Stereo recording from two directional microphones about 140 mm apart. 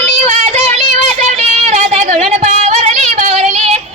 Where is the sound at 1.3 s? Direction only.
55° right (ahead or behind).